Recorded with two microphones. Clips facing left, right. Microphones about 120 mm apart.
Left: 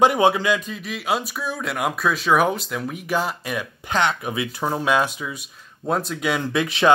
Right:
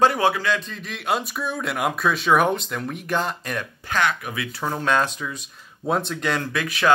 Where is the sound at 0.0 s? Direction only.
20° left (ahead or behind).